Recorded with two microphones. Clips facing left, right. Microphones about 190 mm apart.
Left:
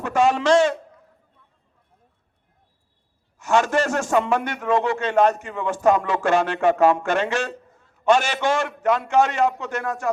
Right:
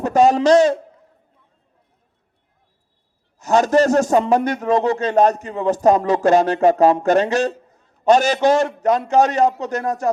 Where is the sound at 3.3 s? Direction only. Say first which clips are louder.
Right 5 dB; 40° right (ahead or behind).